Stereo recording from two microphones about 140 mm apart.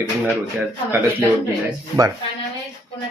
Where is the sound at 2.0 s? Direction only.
25° right (ahead or behind).